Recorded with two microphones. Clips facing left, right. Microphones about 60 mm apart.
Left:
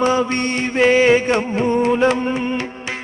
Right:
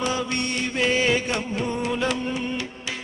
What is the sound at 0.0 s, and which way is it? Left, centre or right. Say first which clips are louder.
Carnatic music: left 8 dB; left.